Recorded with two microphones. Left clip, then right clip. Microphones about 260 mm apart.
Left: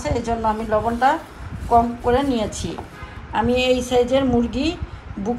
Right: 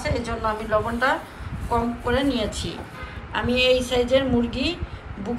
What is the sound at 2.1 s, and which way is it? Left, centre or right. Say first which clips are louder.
Speech: left 4 dB; left.